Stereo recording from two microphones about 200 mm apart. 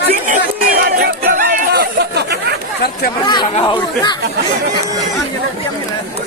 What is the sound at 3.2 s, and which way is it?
Speech, 20° left (ahead or behind).